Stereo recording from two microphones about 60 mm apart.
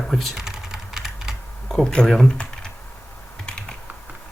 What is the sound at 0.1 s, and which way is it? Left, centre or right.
Typing, centre.